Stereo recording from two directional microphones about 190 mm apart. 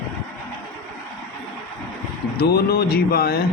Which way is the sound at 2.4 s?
55° left (ahead or behind).